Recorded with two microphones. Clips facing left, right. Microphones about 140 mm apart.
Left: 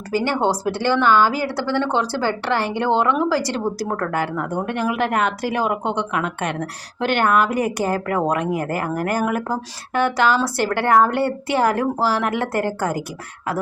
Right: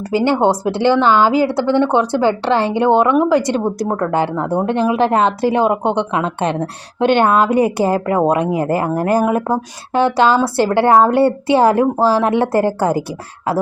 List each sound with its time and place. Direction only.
0.1 s a woman's voice: 25° right (ahead or behind)